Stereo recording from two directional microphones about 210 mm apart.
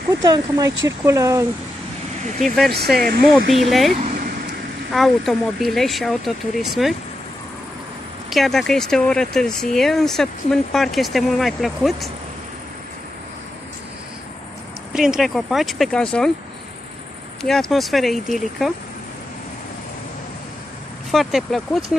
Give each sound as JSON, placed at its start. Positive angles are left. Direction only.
{"t": 0.2, "sound": "speech", "side_deg": -15}
{"t": 2.4, "sound": "speech", "side_deg": 0}
{"t": 4.9, "sound": "speech", "side_deg": 0}
{"t": 8.3, "sound": "speech", "side_deg": 0}
{"t": 14.9, "sound": "speech", "side_deg": 0}
{"t": 17.4, "sound": "speech", "side_deg": 0}
{"t": 21.1, "sound": "speech", "side_deg": 0}